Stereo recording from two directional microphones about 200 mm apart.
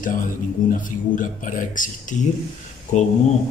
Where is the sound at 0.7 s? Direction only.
40° left (ahead or behind).